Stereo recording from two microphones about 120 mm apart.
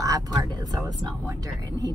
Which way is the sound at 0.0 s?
30° right (ahead or behind).